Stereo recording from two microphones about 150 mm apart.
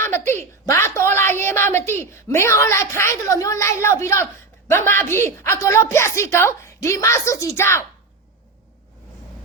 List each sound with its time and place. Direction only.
0.0 s a woman's voice: 15° left (ahead or behind)